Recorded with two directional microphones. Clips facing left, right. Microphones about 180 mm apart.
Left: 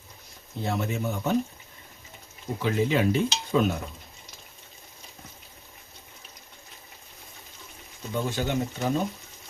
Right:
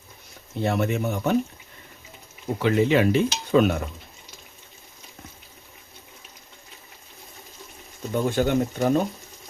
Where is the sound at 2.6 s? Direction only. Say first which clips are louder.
Right 5 dB; 75° right (ahead or behind).